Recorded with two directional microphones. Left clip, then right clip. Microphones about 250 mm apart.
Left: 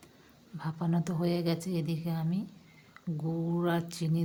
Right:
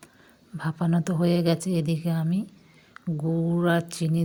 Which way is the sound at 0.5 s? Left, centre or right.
Right.